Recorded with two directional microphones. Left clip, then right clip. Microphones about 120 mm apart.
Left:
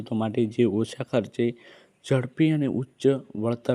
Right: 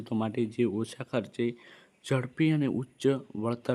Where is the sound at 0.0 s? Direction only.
20° left (ahead or behind).